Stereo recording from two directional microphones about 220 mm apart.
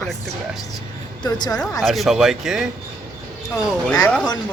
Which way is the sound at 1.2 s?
20° left (ahead or behind).